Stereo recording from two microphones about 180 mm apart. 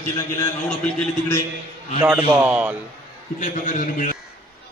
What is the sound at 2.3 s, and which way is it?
Speech, 10° right (ahead or behind).